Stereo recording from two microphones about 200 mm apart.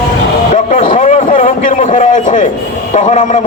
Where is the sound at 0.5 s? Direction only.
40° left (ahead or behind).